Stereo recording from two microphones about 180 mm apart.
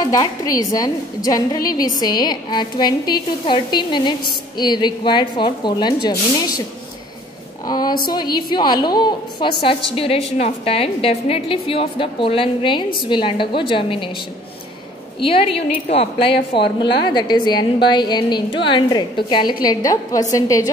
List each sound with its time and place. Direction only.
0.0 s a woman's voice: 20° left (ahead or behind)
7.6 s a woman's voice: 25° left (ahead or behind)
15.9 s a woman's voice: 30° left (ahead or behind)